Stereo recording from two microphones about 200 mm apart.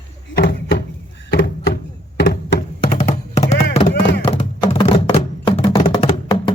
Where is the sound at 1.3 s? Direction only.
50° left (ahead or behind).